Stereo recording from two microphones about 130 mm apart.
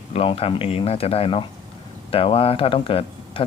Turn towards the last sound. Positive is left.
turn(degrees=45)  # may be behind; listen again after turning